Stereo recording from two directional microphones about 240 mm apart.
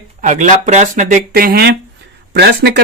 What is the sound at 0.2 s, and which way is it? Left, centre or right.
Speech, right.